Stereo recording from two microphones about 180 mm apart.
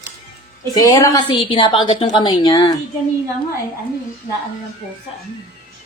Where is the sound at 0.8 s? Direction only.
20° left (ahead or behind).